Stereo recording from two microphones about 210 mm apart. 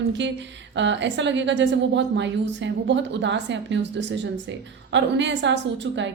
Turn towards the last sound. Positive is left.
turn(degrees=-55)  # may be behind; listen again after turning